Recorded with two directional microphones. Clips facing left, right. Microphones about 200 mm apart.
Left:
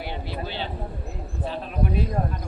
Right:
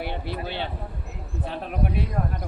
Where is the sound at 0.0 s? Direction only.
60° right (ahead or behind).